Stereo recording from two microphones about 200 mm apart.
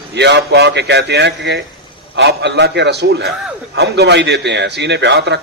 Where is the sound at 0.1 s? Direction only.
60° right (ahead or behind).